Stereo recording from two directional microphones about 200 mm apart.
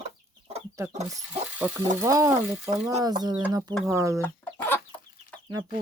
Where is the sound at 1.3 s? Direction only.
10° right (ahead or behind).